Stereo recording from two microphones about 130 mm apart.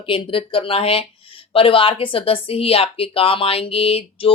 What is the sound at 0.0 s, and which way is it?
Speech, 40° left (ahead or behind).